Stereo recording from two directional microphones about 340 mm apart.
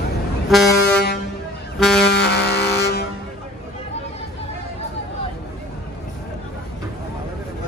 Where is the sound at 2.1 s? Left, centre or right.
Left.